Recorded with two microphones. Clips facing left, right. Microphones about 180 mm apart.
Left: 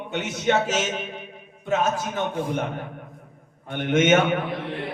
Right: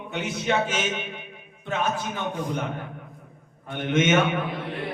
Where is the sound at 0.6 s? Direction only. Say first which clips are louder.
Left 2 dB; 40° left (ahead or behind).